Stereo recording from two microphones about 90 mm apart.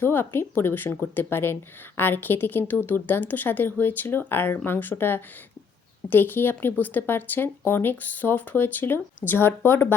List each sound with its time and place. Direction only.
0.0 s speech: 25° left (ahead or behind)